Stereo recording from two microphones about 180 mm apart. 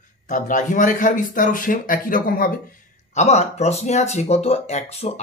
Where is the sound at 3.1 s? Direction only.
40° left (ahead or behind).